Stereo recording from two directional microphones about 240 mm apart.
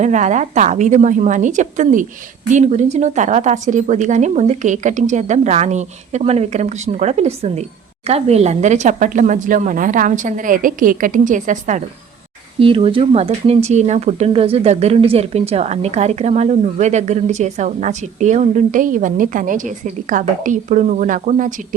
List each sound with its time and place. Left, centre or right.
0.0 s speech: right